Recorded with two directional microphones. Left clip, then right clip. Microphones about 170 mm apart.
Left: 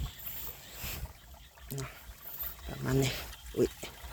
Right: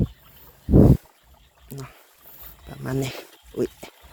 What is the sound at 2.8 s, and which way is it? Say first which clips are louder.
Speech: right 3 dB; 45° right (ahead or behind).